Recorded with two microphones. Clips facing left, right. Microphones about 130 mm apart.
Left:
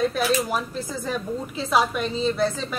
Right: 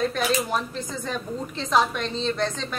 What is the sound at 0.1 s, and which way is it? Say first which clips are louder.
Speech: left 1 dB; 5° left (ahead or behind).